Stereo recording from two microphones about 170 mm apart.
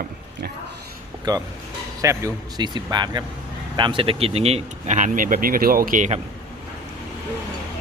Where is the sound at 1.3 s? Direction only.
25° right (ahead or behind); by 6.1 s 50° right (ahead or behind).